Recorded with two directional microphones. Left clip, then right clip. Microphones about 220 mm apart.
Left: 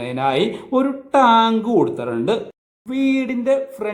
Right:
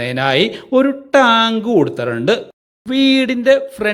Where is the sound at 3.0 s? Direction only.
25° right (ahead or behind).